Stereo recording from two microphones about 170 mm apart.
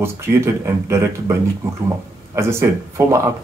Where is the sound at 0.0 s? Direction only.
15° right (ahead or behind).